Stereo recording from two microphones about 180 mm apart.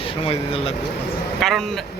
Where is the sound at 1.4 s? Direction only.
Centre (ahead or behind).